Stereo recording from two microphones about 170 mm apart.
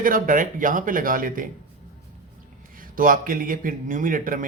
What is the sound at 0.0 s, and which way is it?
Speech, 55° right (ahead or behind).